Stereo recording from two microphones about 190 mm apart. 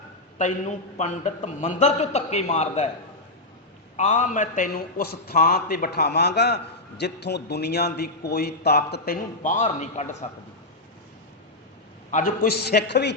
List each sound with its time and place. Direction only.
0.3 s a man's voice: 40° left (ahead or behind)
3.9 s a man's voice: 40° left (ahead or behind); by 9.1 s 60° left (ahead or behind)
9.4 s a man's voice: 40° left (ahead or behind)
12.1 s a man's voice: 50° left (ahead or behind)